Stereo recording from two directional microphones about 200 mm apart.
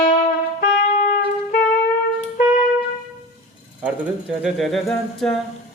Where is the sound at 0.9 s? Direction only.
45° left (ahead or behind).